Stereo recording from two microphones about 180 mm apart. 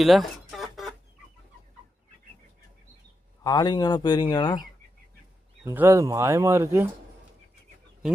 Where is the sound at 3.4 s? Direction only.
20° left (ahead or behind).